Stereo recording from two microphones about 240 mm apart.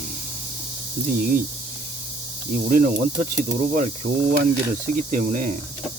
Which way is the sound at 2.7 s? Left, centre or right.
Right.